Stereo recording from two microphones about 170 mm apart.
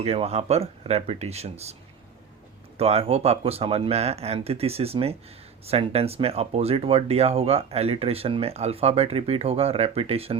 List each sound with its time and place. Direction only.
0.0 s speech: 35° right (ahead or behind)
2.7 s speech: 35° right (ahead or behind)